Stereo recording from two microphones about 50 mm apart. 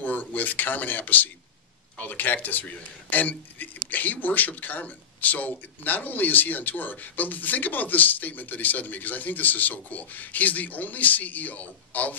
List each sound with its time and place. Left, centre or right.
0.0 s speech: left